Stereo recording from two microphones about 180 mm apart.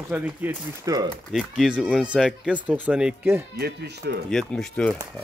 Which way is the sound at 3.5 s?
65° right (ahead or behind).